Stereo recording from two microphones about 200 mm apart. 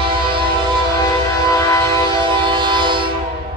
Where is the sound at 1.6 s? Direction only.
15° left (ahead or behind).